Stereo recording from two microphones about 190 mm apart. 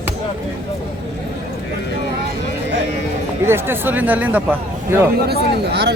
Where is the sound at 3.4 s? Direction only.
10° right (ahead or behind).